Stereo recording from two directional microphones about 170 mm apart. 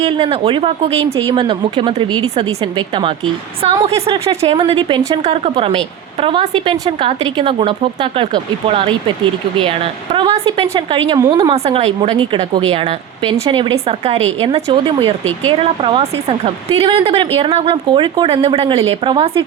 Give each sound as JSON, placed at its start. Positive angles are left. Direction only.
{"t": 0.0, "sound": "speech", "side_deg": -30}
{"t": 3.6, "sound": "speech", "side_deg": -35}
{"t": 11.5, "sound": "speech", "side_deg": -35}